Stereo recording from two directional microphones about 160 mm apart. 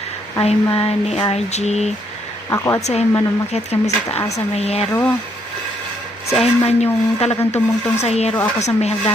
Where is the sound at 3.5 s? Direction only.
40° left (ahead or behind).